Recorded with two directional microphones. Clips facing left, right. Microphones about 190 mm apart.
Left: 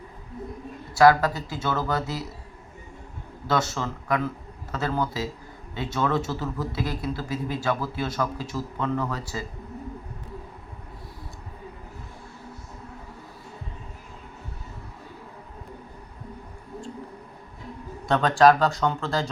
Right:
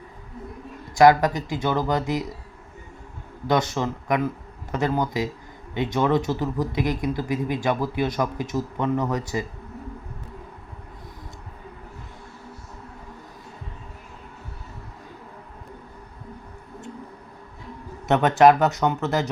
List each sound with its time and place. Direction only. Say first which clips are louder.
0.9 s speech: right 2 dB; 20° right (ahead or behind)
3.4 s speech: right 3 dB; 20° right (ahead or behind)
18.1 s speech: right 2 dB; 20° right (ahead or behind)